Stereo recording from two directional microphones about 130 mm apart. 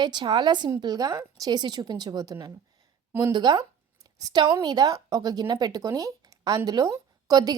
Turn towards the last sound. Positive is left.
turn(degrees=-30)  # may be behind; listen again after turning